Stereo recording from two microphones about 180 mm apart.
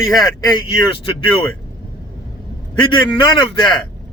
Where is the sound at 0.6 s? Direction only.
30° left (ahead or behind).